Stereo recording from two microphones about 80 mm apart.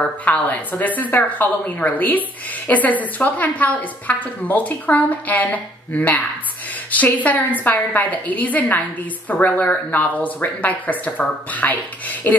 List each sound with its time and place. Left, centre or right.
0.2 s a woman's voice: left